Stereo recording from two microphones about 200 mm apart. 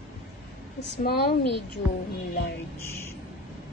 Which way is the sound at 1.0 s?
50° left (ahead or behind).